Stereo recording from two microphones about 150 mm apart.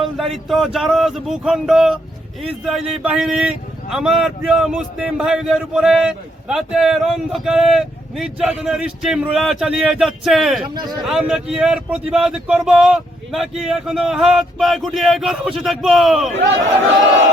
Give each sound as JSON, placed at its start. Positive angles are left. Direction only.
{"t": 0.2, "sound": "a man's voice", "side_deg": 0}
{"t": 10.6, "sound": "a man's voice", "side_deg": -30}
{"t": 11.0, "sound": "a man's voice", "side_deg": -5}